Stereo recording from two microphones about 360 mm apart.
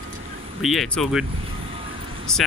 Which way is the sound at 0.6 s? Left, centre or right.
Centre.